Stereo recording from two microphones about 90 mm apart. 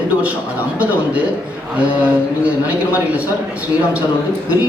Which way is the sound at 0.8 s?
15° right (ahead or behind).